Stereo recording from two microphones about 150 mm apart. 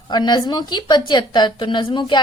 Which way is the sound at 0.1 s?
30° left (ahead or behind).